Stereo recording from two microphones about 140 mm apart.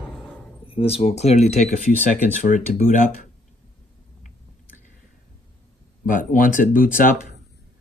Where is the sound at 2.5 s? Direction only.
65° left (ahead or behind).